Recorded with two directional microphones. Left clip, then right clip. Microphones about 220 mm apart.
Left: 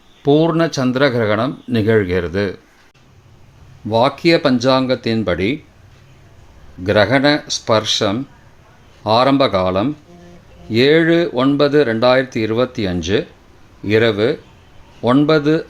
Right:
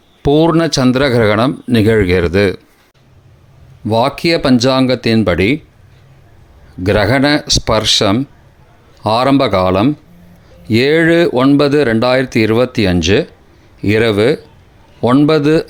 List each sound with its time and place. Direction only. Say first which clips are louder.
0.2 s speech: right 3 dB; 30° right (ahead or behind)
3.8 s speech: right 1 dB; 25° right (ahead or behind)
6.8 s speech: right 1 dB; 30° right (ahead or behind)